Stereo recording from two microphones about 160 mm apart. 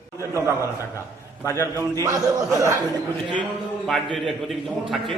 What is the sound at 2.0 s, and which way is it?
Speech, 20° right (ahead or behind).